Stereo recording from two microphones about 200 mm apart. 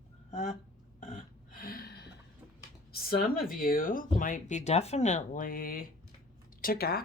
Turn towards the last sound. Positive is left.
turn(degrees=50)  # may be behind; listen again after turning